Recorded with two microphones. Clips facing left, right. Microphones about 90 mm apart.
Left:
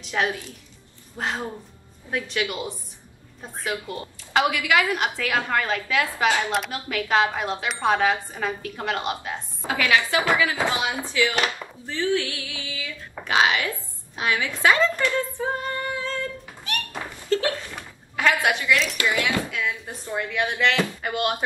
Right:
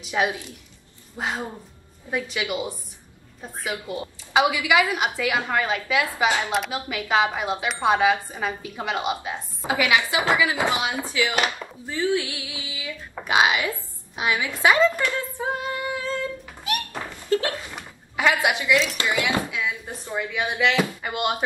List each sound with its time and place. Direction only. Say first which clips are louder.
0.0 s a woman's voice: right 1 dB; 10° right (ahead or behind)
17.3 s a sound: even; 20° right (ahead or behind)
18.7 s speech: right 1 dB; centre (ahead or behind)
18.9 s speech: even; 20° right (ahead or behind)